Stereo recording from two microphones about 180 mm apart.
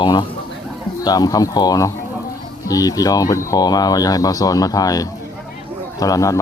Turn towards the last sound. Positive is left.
turn(degrees=20)  # may be behind; listen again after turning